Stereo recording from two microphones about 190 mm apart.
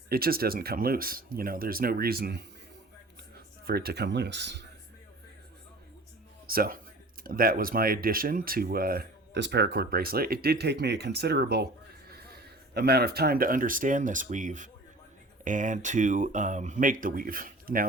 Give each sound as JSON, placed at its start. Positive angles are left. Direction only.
{"t": 0.1, "sound": "speech", "side_deg": -50}
{"t": 6.5, "sound": "speech", "side_deg": -50}